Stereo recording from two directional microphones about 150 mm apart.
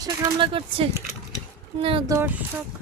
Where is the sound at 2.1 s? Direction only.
20° right (ahead or behind).